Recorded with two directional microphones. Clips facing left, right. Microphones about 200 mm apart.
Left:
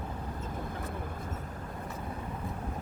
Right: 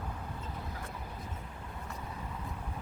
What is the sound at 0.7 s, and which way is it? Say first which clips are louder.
Vehicle: left 5 dB; 50° left (ahead or behind).